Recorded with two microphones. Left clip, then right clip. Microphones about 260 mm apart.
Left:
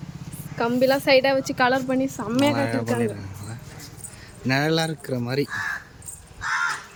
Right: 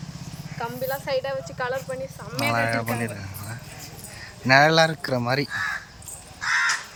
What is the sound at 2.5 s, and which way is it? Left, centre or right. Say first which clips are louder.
Speech: even; centre.